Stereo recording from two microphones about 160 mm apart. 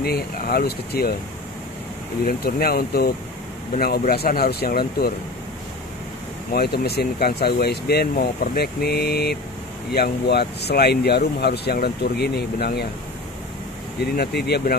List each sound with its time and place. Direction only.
0.0 s speech: 75° left (ahead or behind)
2.2 s speech: 70° left (ahead or behind)
3.7 s speech: 60° left (ahead or behind)
6.5 s speech: 75° left (ahead or behind)
14.1 s speech: 80° left